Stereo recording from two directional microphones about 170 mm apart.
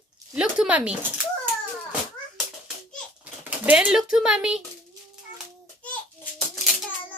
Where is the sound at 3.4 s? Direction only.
10° right (ahead or behind).